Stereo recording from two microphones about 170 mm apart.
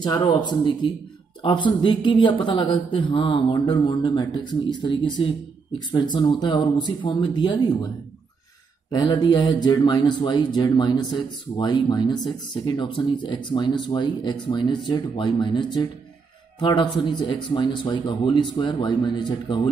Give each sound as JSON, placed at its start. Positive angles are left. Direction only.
{"t": 0.0, "sound": "speech", "side_deg": 25}
{"t": 8.9, "sound": "speech", "side_deg": 25}